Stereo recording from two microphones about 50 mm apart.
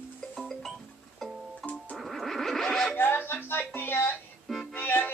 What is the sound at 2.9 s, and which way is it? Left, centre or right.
Music, left.